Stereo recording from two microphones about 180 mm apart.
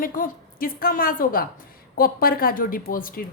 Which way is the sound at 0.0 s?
50° left (ahead or behind).